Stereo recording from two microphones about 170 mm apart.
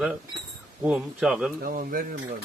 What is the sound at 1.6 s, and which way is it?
Speech, 55° right (ahead or behind).